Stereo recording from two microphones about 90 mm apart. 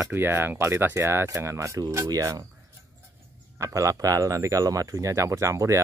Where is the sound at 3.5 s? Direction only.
35° right (ahead or behind).